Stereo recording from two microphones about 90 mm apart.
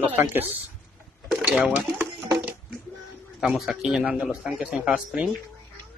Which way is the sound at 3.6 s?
5° right (ahead or behind).